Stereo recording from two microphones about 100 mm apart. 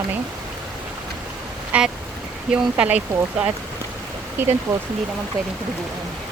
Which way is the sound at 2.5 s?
10° right (ahead or behind).